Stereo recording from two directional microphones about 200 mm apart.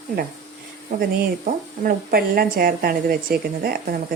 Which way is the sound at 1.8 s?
50° right (ahead or behind).